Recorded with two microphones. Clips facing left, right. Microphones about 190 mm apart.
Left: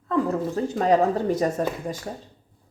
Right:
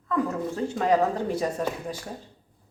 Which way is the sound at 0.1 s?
40° left (ahead or behind).